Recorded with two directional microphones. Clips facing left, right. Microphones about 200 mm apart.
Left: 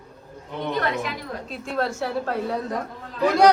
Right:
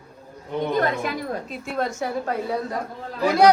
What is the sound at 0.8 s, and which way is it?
Speech, 45° right (ahead or behind).